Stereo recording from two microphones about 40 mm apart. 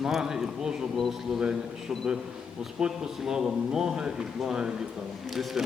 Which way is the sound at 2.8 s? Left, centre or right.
Centre.